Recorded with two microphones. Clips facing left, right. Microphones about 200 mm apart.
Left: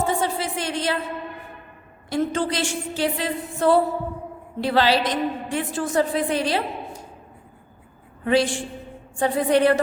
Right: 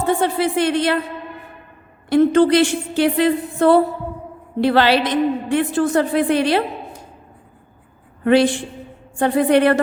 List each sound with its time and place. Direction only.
0.0 s speech: 60° right (ahead or behind)
2.0 s a woman's voice: 65° right (ahead or behind)
8.2 s a woman's voice: 65° right (ahead or behind)